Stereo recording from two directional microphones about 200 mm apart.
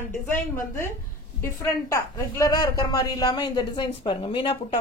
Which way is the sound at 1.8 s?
15° left (ahead or behind).